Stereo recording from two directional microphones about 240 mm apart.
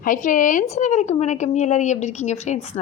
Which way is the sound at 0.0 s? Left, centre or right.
Left.